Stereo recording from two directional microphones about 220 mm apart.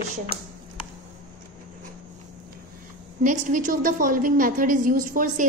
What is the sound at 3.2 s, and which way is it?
A woman's voice, 35° right (ahead or behind).